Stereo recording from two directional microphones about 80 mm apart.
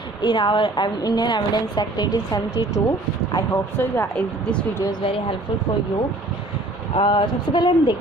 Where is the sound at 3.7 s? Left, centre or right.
Left.